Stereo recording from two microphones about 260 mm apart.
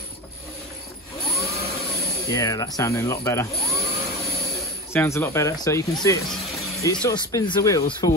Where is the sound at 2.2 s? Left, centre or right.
Centre.